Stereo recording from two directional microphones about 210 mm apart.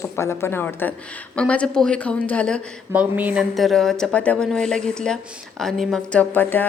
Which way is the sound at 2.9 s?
10° right (ahead or behind).